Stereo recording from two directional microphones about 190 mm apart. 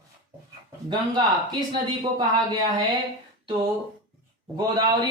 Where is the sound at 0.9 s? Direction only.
20° right (ahead or behind).